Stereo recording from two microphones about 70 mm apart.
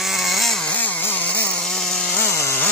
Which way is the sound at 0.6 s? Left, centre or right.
Left.